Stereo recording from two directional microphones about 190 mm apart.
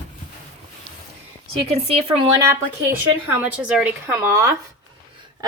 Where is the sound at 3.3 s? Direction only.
10° right (ahead or behind).